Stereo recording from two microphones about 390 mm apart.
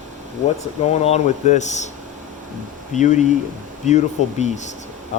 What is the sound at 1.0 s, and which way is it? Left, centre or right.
Speech, centre.